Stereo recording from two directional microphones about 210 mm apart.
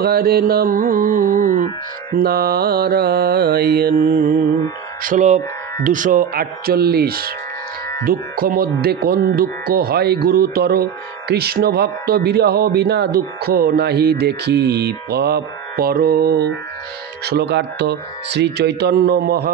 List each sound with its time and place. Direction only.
0.0 s speech: 45° right (ahead or behind)